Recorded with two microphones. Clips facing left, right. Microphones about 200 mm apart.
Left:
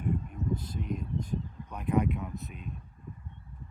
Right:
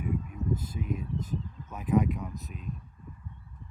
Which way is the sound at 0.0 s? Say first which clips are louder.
Even; 5° right (ahead or behind).